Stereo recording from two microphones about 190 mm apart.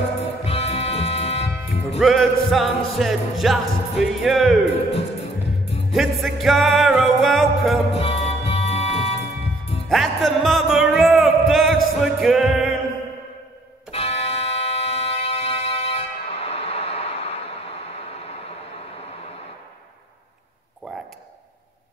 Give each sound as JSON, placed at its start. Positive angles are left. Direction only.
{"t": 0.2, "sound": "music", "side_deg": 30}
{"t": 2.0, "sound": "music", "side_deg": 0}
{"t": 5.9, "sound": "music", "side_deg": 0}
{"t": 7.9, "sound": "music", "side_deg": 30}
{"t": 9.8, "sound": "music", "side_deg": 0}
{"t": 13.9, "sound": "music", "side_deg": 30}
{"t": 20.9, "sound": "a sound", "side_deg": 0}